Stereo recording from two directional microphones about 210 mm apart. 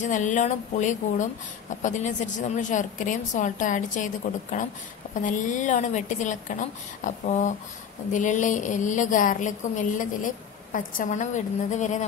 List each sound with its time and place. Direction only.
0.0 s a woman's voice: 35° left (ahead or behind)